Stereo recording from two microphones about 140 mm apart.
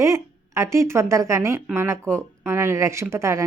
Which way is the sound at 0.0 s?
20° right (ahead or behind).